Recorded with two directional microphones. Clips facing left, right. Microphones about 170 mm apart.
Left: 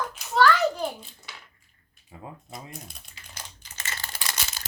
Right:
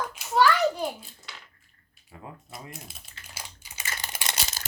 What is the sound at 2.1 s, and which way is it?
Speech, 20° left (ahead or behind).